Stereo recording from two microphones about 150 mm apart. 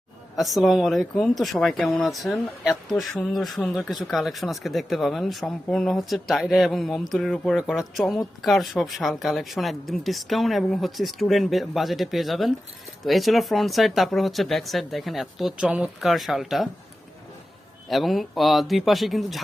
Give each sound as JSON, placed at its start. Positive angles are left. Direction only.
{"t": 0.3, "sound": "speech", "side_deg": 0}
{"t": 17.8, "sound": "speech", "side_deg": 0}